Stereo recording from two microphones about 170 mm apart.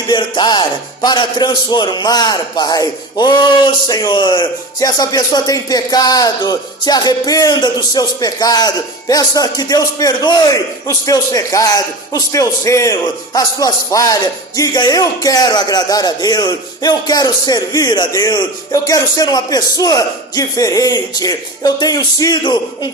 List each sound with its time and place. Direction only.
0.1 s a man's voice: 25° left (ahead or behind)